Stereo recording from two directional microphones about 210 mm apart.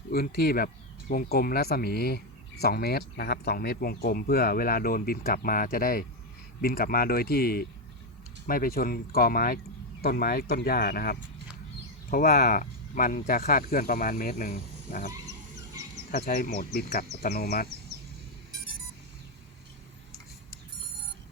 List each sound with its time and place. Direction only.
0.1 s speech: 45° left (ahead or behind)
16.1 s speech: 40° left (ahead or behind)